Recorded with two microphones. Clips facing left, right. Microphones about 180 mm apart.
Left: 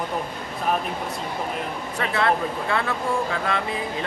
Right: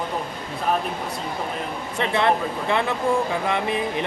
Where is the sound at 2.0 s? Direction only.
20° right (ahead or behind).